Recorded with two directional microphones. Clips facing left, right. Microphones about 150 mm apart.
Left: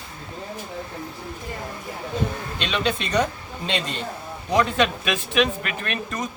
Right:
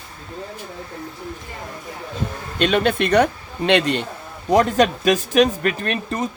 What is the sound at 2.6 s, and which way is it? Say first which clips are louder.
A man's voice: right 8 dB; 50° right (ahead or behind).